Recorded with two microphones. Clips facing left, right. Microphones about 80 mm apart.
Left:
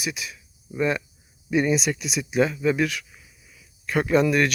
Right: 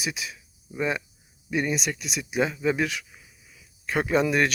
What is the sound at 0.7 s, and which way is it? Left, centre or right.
Speech, centre.